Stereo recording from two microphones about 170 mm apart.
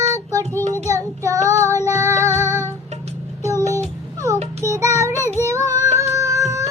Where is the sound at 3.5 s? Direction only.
15° left (ahead or behind).